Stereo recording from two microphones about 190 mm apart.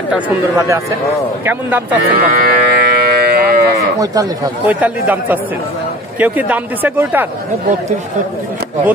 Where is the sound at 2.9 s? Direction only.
60° right (ahead or behind).